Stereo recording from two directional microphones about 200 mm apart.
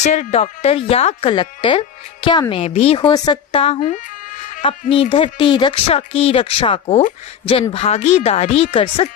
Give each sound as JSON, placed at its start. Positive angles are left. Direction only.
{"t": 0.0, "sound": "a woman's voice", "side_deg": 35}